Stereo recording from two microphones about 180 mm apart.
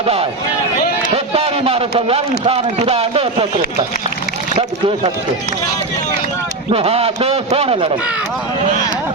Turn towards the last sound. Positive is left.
turn(degrees=-30)  # may be behind; listen again after turning